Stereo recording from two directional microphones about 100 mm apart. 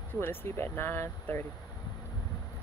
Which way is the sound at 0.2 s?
20° left (ahead or behind).